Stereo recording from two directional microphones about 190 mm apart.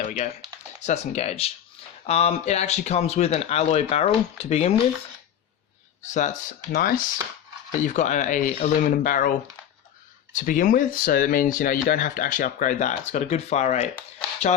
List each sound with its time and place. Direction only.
0.0 s typing: 40° left (ahead or behind)
0.9 s speech: 35° left (ahead or behind)
6.7 s speech: 50° left (ahead or behind)
10.3 s speech: 45° left (ahead or behind)